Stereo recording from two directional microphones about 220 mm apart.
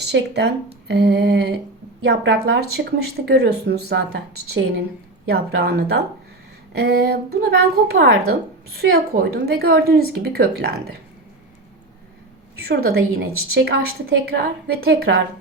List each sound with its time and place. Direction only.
0.0 s speech: 50° right (ahead or behind)
12.6 s speech: 45° right (ahead or behind)